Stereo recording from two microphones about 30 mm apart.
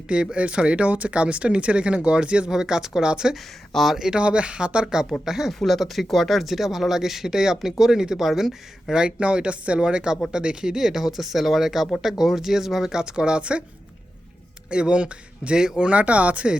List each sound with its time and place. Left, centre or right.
0.1 s speech: right
2.5 s speech: right
4.2 s speech: right
5.2 s speech: centre
5.5 s speech: centre
8.9 s speech: right
9.8 s speech: right; by 12.9 s centre
12.9 s speech: right
14.7 s speech: right
15.5 s speech: right
15.8 s speech: right